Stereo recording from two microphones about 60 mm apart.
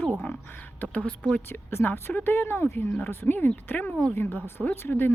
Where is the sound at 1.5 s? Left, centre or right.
Left.